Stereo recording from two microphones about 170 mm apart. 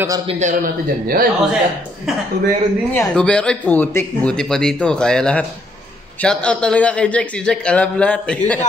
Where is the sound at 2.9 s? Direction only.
10° left (ahead or behind).